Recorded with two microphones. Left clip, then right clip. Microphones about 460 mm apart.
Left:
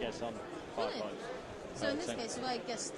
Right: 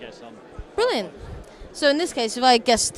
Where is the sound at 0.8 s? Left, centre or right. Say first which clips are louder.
Right 15 dB; right.